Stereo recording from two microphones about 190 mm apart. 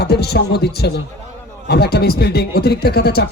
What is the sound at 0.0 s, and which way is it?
A man's voice, 60° left (ahead or behind).